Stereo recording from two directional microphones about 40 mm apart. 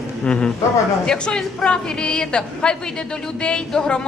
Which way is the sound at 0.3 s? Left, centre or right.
Left.